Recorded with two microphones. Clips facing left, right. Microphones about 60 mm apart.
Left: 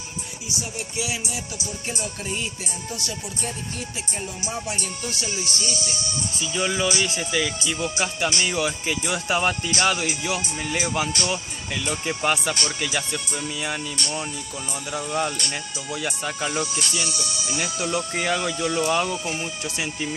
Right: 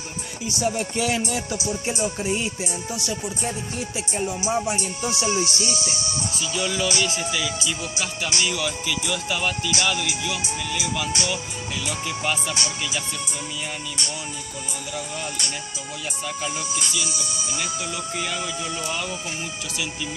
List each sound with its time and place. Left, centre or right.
0.7 s music: right
1.7 s music: centre
5.0 s music: right
6.4 s speech: left
7.3 s speech: left
17.2 s speech: left
17.7 s speech: left